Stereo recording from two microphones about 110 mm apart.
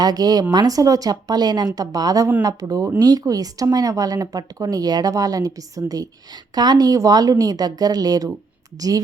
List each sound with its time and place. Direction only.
0.0 s speech: 35° right (ahead or behind)